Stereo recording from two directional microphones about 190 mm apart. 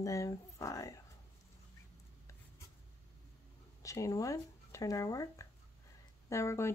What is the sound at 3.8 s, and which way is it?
Speech, 15° left (ahead or behind).